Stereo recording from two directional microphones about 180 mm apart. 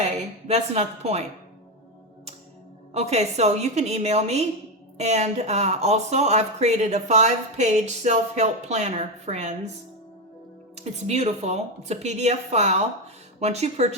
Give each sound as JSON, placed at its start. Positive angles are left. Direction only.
{"t": 0.0, "sound": "a woman's voice", "side_deg": -35}
{"t": 2.9, "sound": "speech", "side_deg": -35}
{"t": 10.8, "sound": "speech", "side_deg": -40}